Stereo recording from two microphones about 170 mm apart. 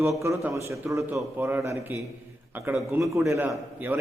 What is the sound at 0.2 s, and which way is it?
A man's voice, 15° right (ahead or behind).